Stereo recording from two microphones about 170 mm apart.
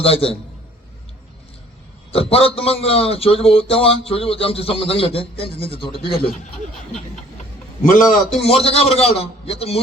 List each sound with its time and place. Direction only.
0.0 s a man's voice: 35° left (ahead or behind)
2.1 s a man's voice: 35° left (ahead or behind)
7.9 s a man's voice: 50° left (ahead or behind)
8.4 s a man's voice: 35° left (ahead or behind)